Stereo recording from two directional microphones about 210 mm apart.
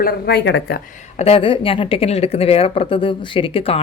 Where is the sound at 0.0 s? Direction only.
50° left (ahead or behind).